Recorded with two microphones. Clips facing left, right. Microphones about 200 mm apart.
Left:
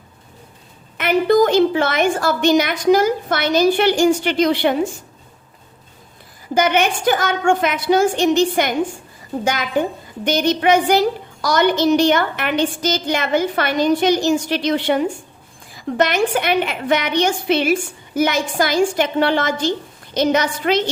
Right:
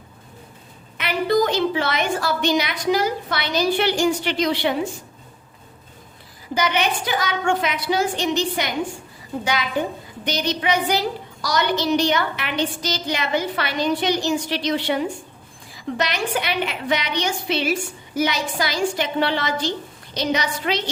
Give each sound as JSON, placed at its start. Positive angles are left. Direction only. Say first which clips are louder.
{"t": 0.9, "sound": "a woman's voice", "louder": "left 6 dB", "side_deg": 50}
{"t": 6.5, "sound": "a woman's voice", "louder": "left 5 dB", "side_deg": 50}